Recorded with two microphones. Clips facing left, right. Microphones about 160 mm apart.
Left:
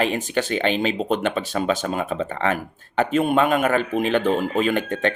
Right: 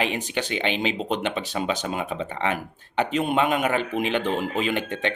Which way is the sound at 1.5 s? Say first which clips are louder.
Left 4 dB; 15° right (ahead or behind).